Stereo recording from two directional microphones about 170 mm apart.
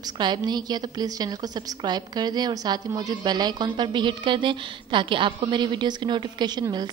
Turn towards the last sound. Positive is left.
turn(degrees=-25)  # may be behind; listen again after turning